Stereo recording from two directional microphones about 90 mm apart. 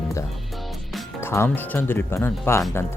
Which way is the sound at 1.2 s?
25° left (ahead or behind).